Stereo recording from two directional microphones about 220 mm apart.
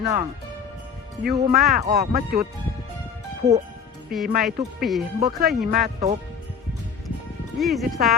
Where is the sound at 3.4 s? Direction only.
30° right (ahead or behind).